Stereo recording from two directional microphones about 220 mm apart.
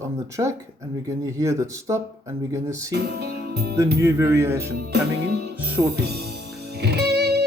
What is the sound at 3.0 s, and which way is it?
Music, 50° right (ahead or behind).